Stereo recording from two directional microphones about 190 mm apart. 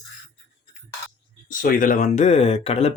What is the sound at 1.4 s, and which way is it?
Speech, 45° left (ahead or behind).